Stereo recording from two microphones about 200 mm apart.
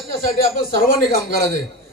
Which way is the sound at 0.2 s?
45° left (ahead or behind).